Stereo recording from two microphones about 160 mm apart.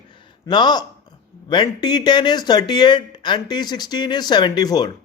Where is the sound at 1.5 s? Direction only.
25° left (ahead or behind).